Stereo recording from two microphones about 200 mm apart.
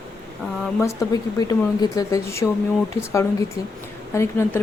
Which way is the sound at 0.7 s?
15° left (ahead or behind).